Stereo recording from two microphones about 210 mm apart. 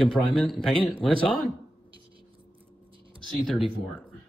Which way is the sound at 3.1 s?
Centre (ahead or behind).